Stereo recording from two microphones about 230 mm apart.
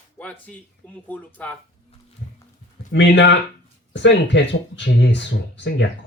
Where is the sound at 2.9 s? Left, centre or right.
Left.